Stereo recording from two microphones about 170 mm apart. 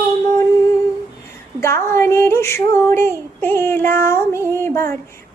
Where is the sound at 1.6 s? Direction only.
15° left (ahead or behind).